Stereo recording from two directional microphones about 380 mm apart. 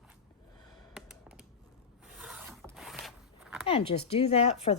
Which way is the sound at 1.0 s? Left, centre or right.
Centre.